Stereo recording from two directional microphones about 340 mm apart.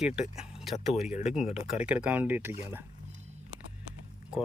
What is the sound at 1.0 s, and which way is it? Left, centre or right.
Speech, left.